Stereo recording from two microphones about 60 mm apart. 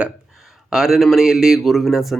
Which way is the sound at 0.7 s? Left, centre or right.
Centre.